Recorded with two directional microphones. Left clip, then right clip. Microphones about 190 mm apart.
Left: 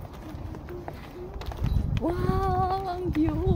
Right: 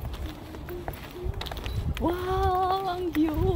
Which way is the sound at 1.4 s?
55° right (ahead or behind).